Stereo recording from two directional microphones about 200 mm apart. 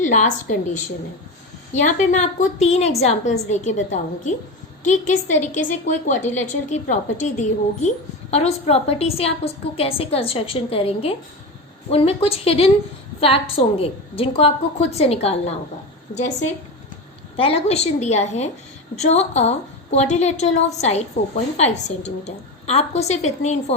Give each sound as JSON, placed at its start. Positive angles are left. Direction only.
{"t": 0.0, "sound": "a woman's voice", "side_deg": 35}
{"t": 1.7, "sound": "a woman's voice", "side_deg": 35}
{"t": 17.3, "sound": "a woman's voice", "side_deg": 30}